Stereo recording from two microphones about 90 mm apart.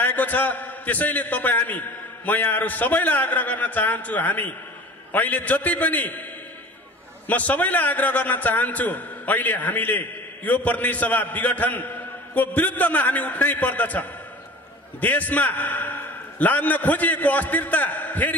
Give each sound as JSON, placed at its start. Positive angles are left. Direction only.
{"t": 0.0, "sound": "a man's voice", "side_deg": 20}
{"t": 7.2, "sound": "a man's voice", "side_deg": 20}